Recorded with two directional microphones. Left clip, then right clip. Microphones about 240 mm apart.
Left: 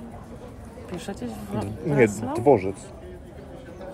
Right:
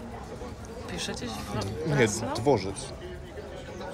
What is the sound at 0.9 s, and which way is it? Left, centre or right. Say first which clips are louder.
A woman's voice: even; centre.